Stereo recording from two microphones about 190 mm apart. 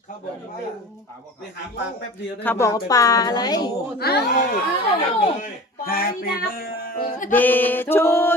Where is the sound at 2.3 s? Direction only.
10° left (ahead or behind).